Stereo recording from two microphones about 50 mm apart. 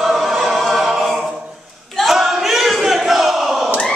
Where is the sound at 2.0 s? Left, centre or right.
Centre.